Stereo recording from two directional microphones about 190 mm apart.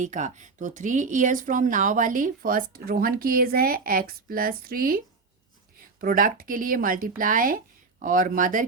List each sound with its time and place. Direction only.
0.0 s speech: 40° right (ahead or behind)